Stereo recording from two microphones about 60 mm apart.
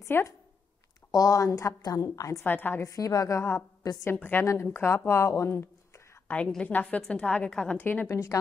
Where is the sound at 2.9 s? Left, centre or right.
Left.